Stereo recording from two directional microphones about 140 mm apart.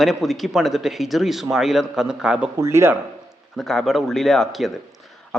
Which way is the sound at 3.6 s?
Centre (ahead or behind).